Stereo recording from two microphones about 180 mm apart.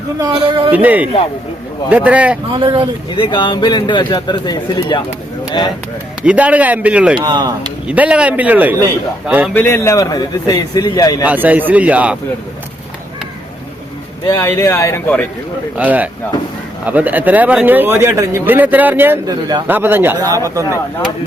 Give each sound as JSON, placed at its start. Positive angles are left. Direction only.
{"t": 0.2, "sound": "a man's voice", "side_deg": -25}
{"t": 0.7, "sound": "speech", "side_deg": -10}
{"t": 2.5, "sound": "a man's voice", "side_deg": -30}
{"t": 3.1, "sound": "speech", "side_deg": 25}
{"t": 6.2, "sound": "speech", "side_deg": -5}
{"t": 7.2, "sound": "a man's voice", "side_deg": -25}
{"t": 7.9, "sound": "speech", "side_deg": -5}
{"t": 9.6, "sound": "speech", "side_deg": 15}
{"t": 11.3, "sound": "speech", "side_deg": -10}
{"t": 14.3, "sound": "speech", "side_deg": 15}
{"t": 15.8, "sound": "speech", "side_deg": -10}